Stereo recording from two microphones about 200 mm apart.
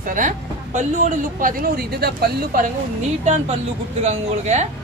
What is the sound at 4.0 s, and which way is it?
Speech, 35° right (ahead or behind).